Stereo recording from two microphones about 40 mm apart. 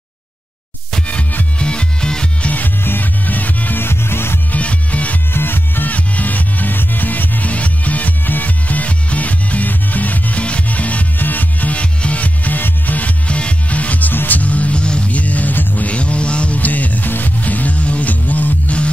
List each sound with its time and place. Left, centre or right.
1.6 s music: left
2.4 s music: left
2.8 s music: left
3.8 s music: left
4.5 s music: left
5.3 s music: left
5.9 s music: left
10.4 s rub: left
11.1 s music: left
11.7 s music: left
13.3 s music: left
16.5 s music: left